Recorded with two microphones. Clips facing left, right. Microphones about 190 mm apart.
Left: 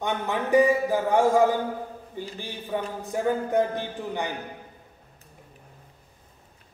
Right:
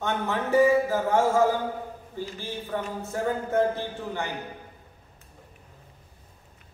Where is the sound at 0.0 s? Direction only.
15° left (ahead or behind).